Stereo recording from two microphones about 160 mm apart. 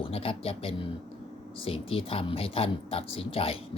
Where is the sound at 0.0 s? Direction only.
35° left (ahead or behind).